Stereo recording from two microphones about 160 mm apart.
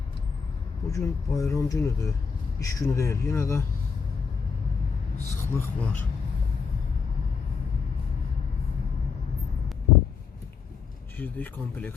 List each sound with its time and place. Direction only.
0.9 s speech: 20° left (ahead or behind)
5.4 s speech: 15° left (ahead or behind)
11.2 s speech: 10° left (ahead or behind)